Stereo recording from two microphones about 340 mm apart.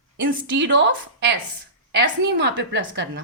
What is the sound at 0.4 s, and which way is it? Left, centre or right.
A woman's voice, right.